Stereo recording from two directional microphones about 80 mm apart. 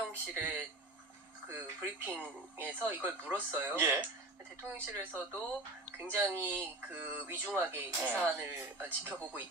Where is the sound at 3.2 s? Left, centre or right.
Right.